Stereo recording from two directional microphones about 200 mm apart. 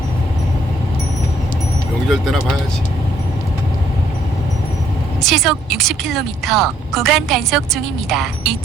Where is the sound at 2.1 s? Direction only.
Centre (ahead or behind).